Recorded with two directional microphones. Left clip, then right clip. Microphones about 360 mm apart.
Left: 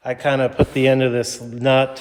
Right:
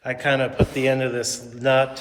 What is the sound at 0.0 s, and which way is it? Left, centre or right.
A man's voice, centre.